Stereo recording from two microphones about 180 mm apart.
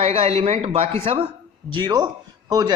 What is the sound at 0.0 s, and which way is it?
A man's voice, 35° right (ahead or behind).